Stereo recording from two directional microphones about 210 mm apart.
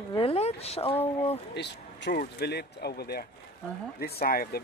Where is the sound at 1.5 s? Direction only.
55° left (ahead or behind).